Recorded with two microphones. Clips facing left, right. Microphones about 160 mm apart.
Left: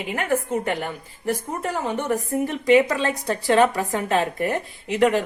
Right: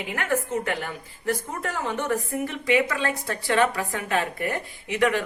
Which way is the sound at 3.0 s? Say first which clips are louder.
Left 4 dB; 20° left (ahead or behind).